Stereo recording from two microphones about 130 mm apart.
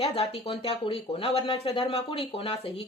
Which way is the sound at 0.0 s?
50° left (ahead or behind).